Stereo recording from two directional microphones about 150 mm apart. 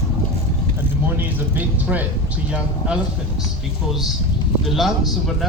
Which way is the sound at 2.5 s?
5° right (ahead or behind).